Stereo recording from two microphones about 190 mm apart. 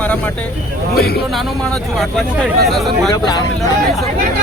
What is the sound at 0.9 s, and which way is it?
Speech, 55° left (ahead or behind).